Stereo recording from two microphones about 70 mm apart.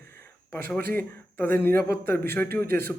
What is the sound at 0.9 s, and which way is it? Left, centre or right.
A man's voice, left.